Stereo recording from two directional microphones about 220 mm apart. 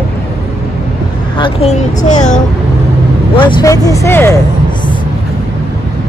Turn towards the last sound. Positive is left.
turn(degrees=10)  # may be behind; listen again after turning